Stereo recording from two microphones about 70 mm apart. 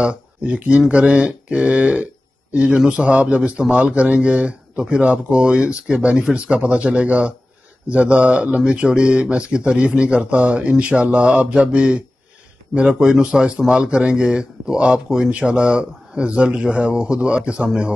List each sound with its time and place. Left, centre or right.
0.0 s a man's voice: centre